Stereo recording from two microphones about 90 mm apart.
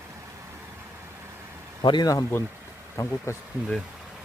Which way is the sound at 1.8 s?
60° left (ahead or behind).